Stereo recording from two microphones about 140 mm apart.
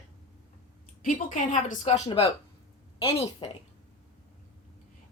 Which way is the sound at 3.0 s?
40° left (ahead or behind).